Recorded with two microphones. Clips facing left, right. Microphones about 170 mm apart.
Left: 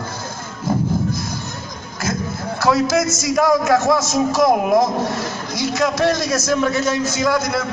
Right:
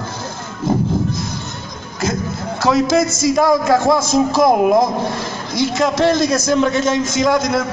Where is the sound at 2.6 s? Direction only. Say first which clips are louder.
Right 2 dB; 25° right (ahead or behind).